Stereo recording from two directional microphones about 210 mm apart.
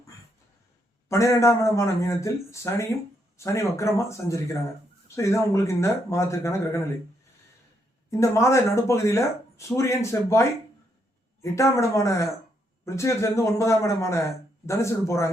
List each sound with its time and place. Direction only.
1.0 s a man's voice: 15° left (ahead or behind)
8.1 s a man's voice: 15° left (ahead or behind)
11.5 s a man's voice: 15° left (ahead or behind)